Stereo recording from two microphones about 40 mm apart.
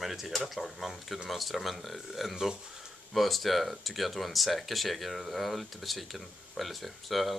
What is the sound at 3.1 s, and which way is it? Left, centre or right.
Speech, centre.